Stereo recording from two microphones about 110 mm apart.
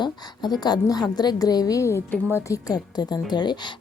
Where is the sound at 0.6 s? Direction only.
40° left (ahead or behind).